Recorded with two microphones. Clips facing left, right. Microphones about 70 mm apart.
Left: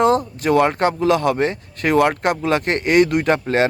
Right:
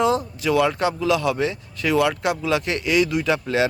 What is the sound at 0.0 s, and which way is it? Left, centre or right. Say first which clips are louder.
Speech: left 4 dB; left.